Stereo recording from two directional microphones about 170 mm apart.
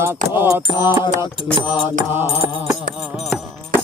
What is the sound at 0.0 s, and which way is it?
Keys jangling, 15° right (ahead or behind).